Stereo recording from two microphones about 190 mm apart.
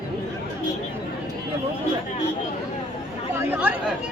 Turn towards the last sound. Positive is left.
turn(degrees=-10)  # may be behind; listen again after turning